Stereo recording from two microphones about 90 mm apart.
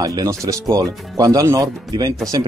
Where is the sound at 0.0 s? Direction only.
45° right (ahead or behind).